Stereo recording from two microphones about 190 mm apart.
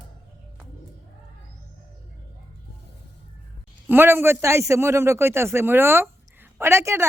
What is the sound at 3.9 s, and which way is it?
Speech, 10° right (ahead or behind).